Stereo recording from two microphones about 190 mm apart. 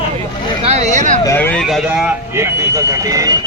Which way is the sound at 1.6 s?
Centre (ahead or behind).